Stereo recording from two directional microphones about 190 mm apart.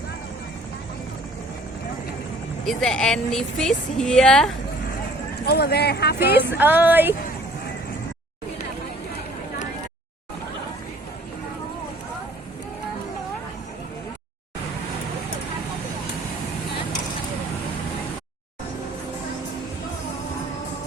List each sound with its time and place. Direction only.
2.6 s a woman's voice: 5° left (ahead or behind)
5.5 s speech: 55° left (ahead or behind)
6.3 s music: 10° right (ahead or behind)